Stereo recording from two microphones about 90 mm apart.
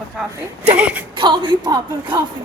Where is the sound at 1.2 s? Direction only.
60° right (ahead or behind).